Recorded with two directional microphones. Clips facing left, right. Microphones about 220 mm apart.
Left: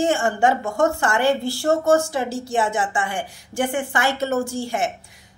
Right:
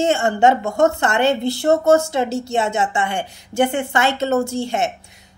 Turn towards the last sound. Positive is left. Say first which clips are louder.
# right 3 dB
turn(degrees=-25)  # may be behind; listen again after turning